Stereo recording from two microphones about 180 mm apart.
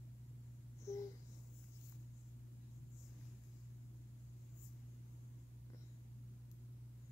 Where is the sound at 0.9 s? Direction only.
15° left (ahead or behind).